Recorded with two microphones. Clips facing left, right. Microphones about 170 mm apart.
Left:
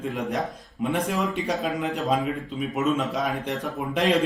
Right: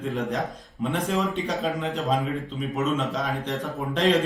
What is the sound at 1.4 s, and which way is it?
Speech, centre (ahead or behind).